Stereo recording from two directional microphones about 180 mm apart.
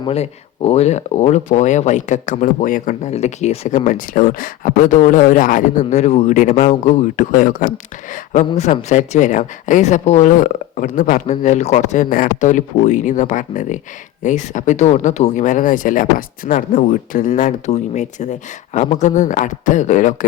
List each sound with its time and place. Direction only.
0.0 s speech: 35° left (ahead or behind)